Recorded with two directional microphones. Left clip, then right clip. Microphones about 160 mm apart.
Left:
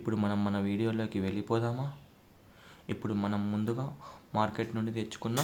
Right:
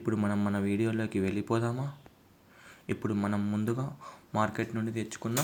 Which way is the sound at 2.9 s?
20° right (ahead or behind).